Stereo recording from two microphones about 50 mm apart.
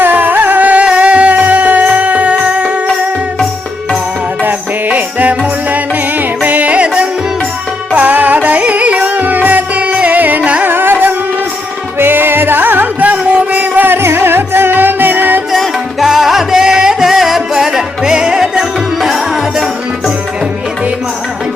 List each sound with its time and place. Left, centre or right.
0.0 s music: right
4.4 s music: right
7.9 s music: right
10.6 s carnatic music: right
11.9 s music: right
15.5 s music: centre